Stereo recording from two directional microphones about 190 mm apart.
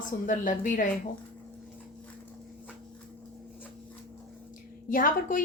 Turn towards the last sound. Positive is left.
turn(degrees=45)  # may be behind; listen again after turning